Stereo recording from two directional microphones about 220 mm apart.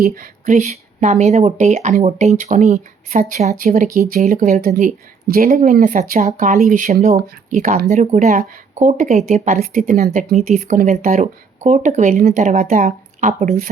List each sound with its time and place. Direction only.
0.0 s speech: 40° right (ahead or behind)